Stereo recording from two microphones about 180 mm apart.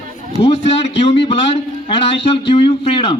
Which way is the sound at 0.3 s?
35° left (ahead or behind).